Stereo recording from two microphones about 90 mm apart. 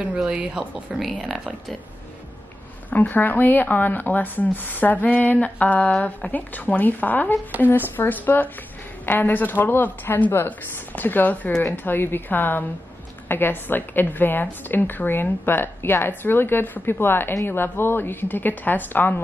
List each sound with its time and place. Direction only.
0.2 s speech: 10° right (ahead or behind)
2.9 s a woman's voice: 20° left (ahead or behind)